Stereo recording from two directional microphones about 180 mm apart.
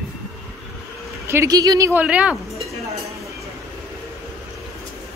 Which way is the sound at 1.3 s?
15° right (ahead or behind).